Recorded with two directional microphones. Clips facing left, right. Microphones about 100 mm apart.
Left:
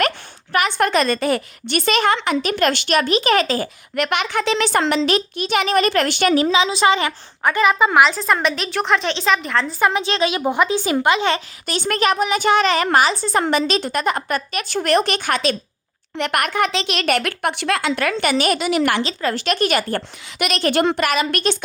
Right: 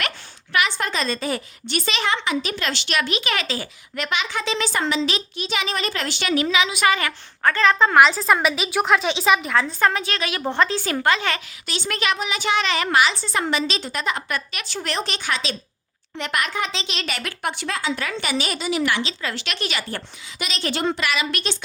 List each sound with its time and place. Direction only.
0.7 s a woman's voice: 60° left (ahead or behind); by 3.7 s 45° left (ahead or behind)
3.9 s speech: 60° left (ahead or behind)
6.3 s a woman's voice: 30° left (ahead or behind); by 9.7 s 5° right (ahead or behind)
10.0 s speech: 25° left (ahead or behind)
11.3 s a woman's voice: 45° left (ahead or behind)